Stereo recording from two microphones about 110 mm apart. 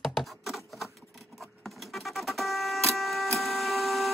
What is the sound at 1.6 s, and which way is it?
Vehicle, centre (ahead or behind).